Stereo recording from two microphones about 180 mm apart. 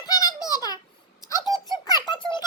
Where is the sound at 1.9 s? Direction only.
25° left (ahead or behind).